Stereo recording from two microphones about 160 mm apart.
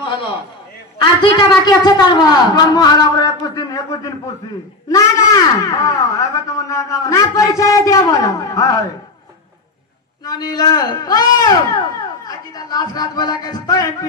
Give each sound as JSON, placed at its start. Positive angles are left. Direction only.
{"t": 1.0, "sound": "a woman's voice", "side_deg": 30}
{"t": 10.2, "sound": "a woman's voice", "side_deg": 25}